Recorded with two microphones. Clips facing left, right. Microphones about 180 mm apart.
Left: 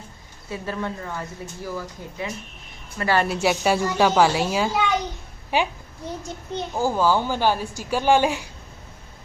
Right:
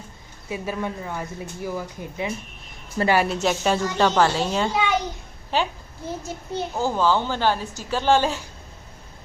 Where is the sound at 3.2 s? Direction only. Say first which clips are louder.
Left 1 dB; 10° left (ahead or behind).